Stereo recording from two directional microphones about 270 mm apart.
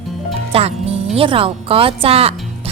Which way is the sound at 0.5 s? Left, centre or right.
Right.